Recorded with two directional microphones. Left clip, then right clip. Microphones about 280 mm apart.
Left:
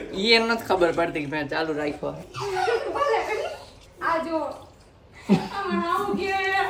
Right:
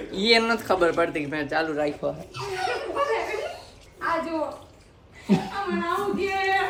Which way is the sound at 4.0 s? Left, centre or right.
Centre.